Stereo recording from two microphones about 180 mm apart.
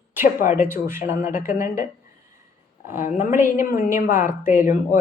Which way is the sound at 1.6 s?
50° left (ahead or behind).